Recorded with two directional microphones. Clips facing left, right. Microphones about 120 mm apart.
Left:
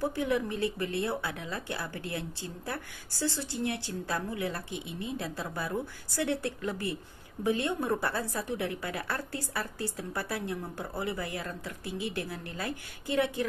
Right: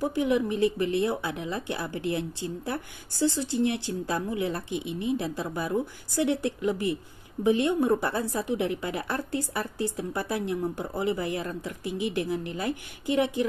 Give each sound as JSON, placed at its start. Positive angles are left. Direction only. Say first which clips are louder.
{"t": 0.0, "sound": "speech", "louder": "right 4 dB", "side_deg": -15}